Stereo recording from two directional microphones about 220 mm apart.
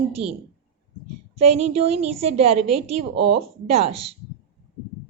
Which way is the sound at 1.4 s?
30° right (ahead or behind).